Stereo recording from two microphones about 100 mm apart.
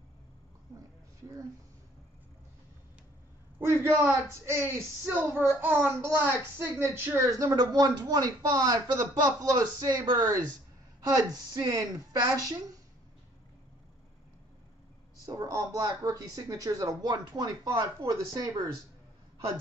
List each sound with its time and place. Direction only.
3.5 s a man's voice: 20° right (ahead or behind)
15.2 s a man's voice: 35° right (ahead or behind)